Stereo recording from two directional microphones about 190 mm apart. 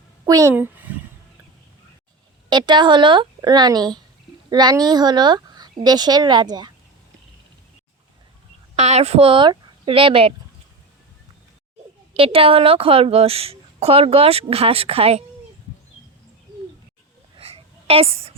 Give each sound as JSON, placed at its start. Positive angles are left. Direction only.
{"t": 0.3, "sound": "a child's voice", "side_deg": -15}
{"t": 2.5, "sound": "speech", "side_deg": -25}
{"t": 8.7, "sound": "speech", "side_deg": -35}
{"t": 12.1, "sound": "a woman's voice", "side_deg": -30}
{"t": 17.3, "sound": "a sound", "side_deg": -30}